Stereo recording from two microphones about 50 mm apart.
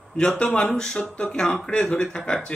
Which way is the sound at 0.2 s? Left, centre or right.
Centre.